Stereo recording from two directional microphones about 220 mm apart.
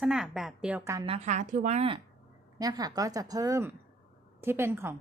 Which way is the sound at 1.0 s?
30° right (ahead or behind).